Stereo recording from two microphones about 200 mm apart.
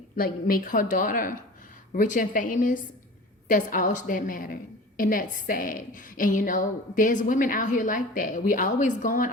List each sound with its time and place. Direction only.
0.2 s a woman's voice: 45° left (ahead or behind)